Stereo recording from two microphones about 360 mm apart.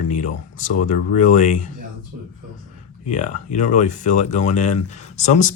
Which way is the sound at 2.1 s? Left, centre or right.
Right.